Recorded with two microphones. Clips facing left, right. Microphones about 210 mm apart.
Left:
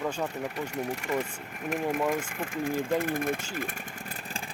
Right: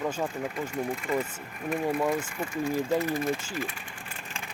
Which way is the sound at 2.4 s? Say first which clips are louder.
Right 2 dB; 50° left (ahead or behind).